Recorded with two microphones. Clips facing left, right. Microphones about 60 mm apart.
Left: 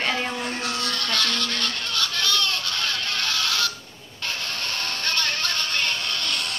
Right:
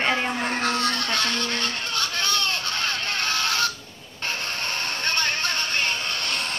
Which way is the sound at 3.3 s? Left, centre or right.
Right.